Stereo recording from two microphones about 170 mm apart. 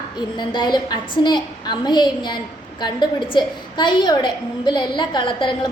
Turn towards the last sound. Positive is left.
turn(degrees=30)  # may be behind; listen again after turning